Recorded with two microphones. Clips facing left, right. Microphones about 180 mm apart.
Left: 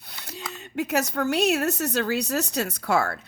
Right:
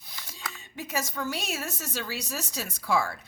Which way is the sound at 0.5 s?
65° left (ahead or behind).